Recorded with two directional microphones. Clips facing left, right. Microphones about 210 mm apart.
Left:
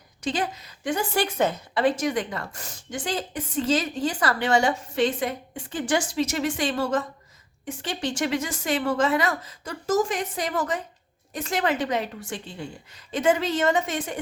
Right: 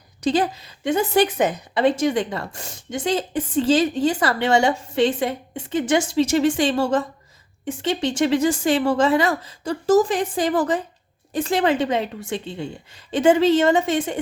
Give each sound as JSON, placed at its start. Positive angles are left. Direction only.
{"t": 0.2, "sound": "a woman's voice", "side_deg": -35}